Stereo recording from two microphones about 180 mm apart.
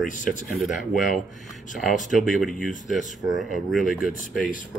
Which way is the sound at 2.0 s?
Centre (ahead or behind).